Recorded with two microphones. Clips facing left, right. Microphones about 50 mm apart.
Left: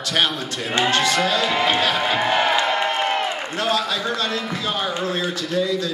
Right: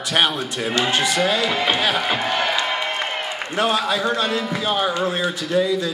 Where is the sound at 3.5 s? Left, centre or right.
Right.